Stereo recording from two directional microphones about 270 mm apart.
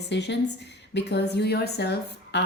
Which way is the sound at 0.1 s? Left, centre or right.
Left.